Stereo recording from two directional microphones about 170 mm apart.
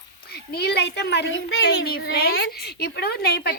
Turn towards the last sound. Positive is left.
turn(degrees=70)  # may be behind; listen again after turning